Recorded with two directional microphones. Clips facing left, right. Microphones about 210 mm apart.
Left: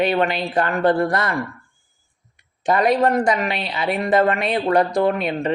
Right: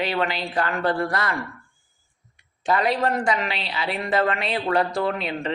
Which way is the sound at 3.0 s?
40° left (ahead or behind).